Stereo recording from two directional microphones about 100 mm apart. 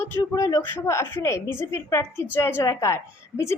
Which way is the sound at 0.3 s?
30° left (ahead or behind).